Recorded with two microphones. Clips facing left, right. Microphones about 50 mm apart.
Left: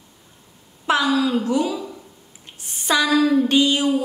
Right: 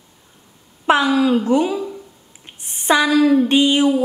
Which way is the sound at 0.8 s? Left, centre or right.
Right.